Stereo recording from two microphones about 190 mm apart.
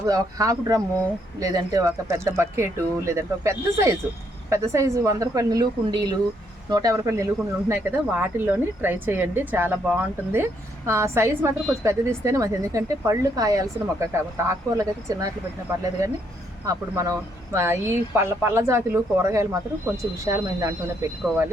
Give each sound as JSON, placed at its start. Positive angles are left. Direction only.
{"t": 0.0, "sound": "speech", "side_deg": -20}
{"t": 16.6, "sound": "speech", "side_deg": -15}